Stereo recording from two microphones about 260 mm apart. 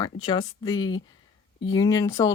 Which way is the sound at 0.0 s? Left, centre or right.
Centre.